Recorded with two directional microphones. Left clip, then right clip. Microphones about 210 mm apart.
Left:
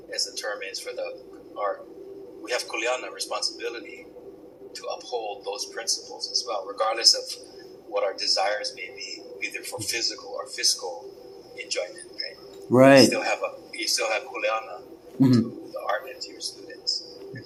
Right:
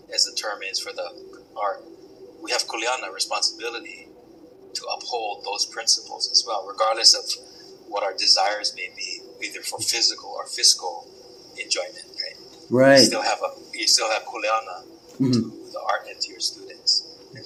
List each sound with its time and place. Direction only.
0.1 s a man's voice: 15° right (ahead or behind)
11.5 s a sound: 15° right (ahead or behind)
12.7 s speech: 5° left (ahead or behind)
13.1 s a man's voice: 15° right (ahead or behind)
15.2 s speech: 15° left (ahead or behind)
15.7 s a man's voice: 15° right (ahead or behind)